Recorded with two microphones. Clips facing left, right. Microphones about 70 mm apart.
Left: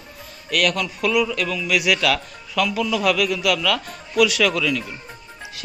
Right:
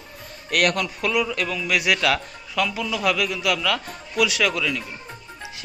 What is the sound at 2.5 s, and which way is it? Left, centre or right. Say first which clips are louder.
A man's voice: left 3 dB; centre.